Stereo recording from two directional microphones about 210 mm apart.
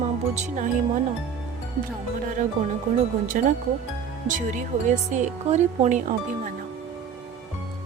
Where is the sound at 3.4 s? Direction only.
40° right (ahead or behind).